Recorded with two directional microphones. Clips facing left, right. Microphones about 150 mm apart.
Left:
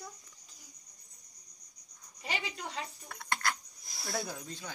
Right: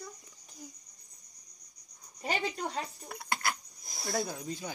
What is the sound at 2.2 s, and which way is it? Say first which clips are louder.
Speech: right 6 dB; 45° right (ahead or behind).